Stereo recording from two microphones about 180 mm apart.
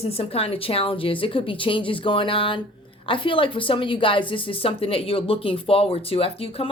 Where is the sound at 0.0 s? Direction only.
35° left (ahead or behind).